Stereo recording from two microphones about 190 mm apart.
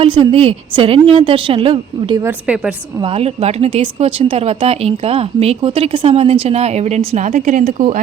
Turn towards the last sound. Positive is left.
turn(degrees=-40)  # may be behind; listen again after turning